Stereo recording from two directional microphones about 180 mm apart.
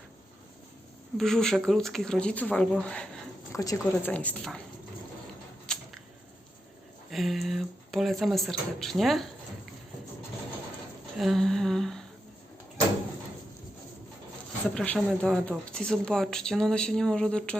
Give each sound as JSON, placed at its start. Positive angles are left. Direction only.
{"t": 1.2, "sound": "speech", "side_deg": 0}
{"t": 3.5, "sound": "speech", "side_deg": 15}
{"t": 5.7, "sound": "a sound", "side_deg": 5}
{"t": 7.1, "sound": "speech", "side_deg": 0}
{"t": 11.2, "sound": "speech", "side_deg": 0}
{"t": 14.8, "sound": "speech", "side_deg": 5}